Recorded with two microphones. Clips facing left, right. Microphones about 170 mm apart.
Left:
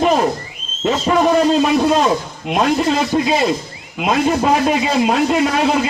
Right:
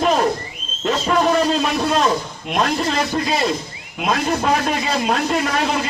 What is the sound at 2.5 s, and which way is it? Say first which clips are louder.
A man's voice: left 4 dB; 5° left (ahead or behind).